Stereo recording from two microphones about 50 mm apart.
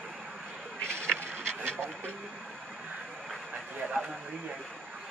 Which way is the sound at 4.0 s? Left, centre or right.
Right.